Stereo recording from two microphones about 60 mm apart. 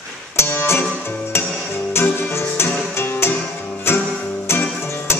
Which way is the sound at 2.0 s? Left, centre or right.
Left.